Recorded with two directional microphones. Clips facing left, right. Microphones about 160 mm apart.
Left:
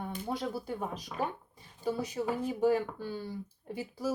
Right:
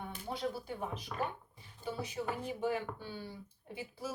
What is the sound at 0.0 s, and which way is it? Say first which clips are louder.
Speech: left 3 dB; 40° left (ahead or behind).